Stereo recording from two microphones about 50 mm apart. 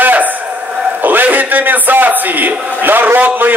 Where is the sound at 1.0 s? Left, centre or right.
Right.